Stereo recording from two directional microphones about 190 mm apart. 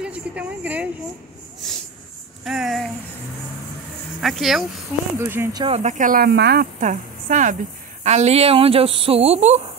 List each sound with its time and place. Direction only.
0.0 s a woman's voice: 5° right (ahead or behind)
2.4 s a sound: centre (ahead or behind)
4.2 s speech: centre (ahead or behind)
5.2 s speech: 10° right (ahead or behind)
5.6 s speech: 35° right (ahead or behind); by 6.7 s 60° right (ahead or behind)
6.8 s a woman's voice: 40° right (ahead or behind)